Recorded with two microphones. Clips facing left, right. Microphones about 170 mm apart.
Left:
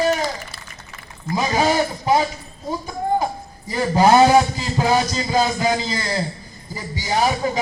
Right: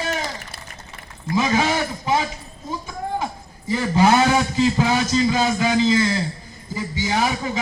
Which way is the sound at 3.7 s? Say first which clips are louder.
Left 2 dB; 40° left (ahead or behind).